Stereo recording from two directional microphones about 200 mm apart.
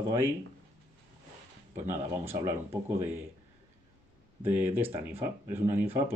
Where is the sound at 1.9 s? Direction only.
10° right (ahead or behind).